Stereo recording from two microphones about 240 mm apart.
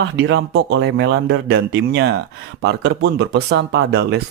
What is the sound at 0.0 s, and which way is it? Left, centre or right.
Speech, right.